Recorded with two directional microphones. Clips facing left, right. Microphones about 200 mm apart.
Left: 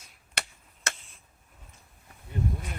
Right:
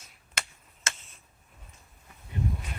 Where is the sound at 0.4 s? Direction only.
65° left (ahead or behind).